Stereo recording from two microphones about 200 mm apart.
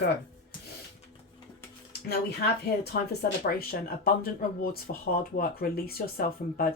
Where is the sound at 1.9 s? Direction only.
55° left (ahead or behind).